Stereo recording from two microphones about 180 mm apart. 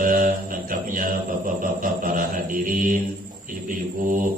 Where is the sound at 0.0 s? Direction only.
55° right (ahead or behind).